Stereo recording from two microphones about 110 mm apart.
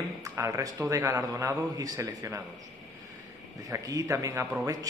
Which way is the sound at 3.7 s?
30° right (ahead or behind).